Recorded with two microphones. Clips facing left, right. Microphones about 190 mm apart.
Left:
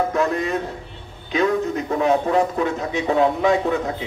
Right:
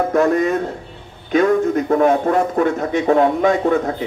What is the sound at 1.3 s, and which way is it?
Speech, 50° right (ahead or behind).